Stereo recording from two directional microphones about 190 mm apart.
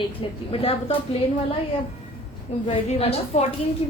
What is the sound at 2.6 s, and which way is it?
Speech, 30° left (ahead or behind).